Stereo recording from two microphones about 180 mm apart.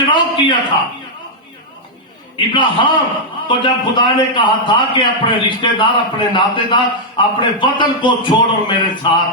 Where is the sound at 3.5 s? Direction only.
25° left (ahead or behind).